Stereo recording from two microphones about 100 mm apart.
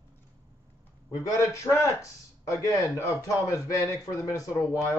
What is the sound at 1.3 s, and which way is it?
A man's voice, 30° left (ahead or behind).